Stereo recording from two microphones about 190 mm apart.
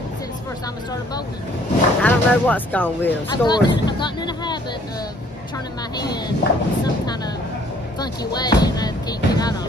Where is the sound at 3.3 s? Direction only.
20° left (ahead or behind).